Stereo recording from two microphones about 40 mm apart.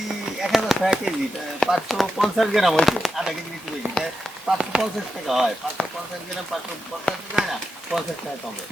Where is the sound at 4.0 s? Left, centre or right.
Left.